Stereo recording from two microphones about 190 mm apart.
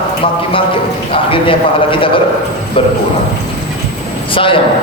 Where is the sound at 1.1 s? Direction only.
30° left (ahead or behind).